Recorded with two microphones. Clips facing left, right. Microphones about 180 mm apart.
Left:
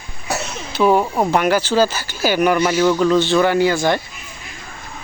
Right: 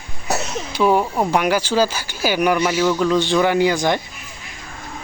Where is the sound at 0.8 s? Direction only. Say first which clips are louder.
Left 2 dB; 10° left (ahead or behind).